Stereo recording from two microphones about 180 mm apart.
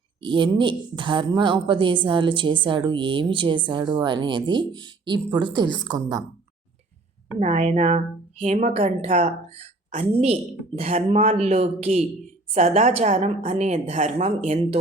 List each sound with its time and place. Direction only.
0.2 s a woman's voice: 25° right (ahead or behind)
7.3 s a woman's voice: 40° right (ahead or behind)